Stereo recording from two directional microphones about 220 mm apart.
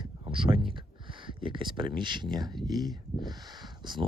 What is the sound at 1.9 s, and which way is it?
Speech, 20° right (ahead or behind).